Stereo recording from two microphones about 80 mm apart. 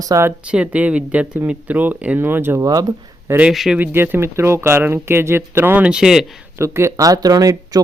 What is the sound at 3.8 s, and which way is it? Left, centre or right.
Speech, right.